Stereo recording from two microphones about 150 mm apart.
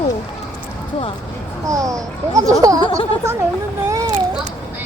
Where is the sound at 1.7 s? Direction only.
20° right (ahead or behind).